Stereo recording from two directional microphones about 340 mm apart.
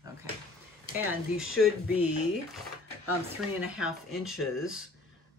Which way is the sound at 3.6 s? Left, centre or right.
Centre.